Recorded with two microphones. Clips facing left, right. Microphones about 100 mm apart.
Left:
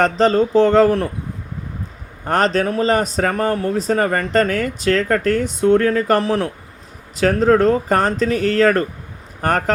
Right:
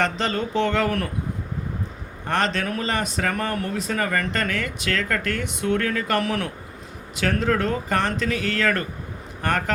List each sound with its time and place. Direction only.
0.0 s speech: 35° left (ahead or behind)
2.2 s speech: 35° left (ahead or behind)